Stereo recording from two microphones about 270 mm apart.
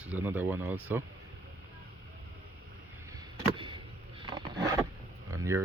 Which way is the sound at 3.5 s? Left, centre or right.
Centre.